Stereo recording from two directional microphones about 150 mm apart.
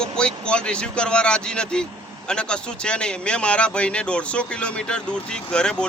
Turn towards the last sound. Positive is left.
turn(degrees=5)  # may be behind; listen again after turning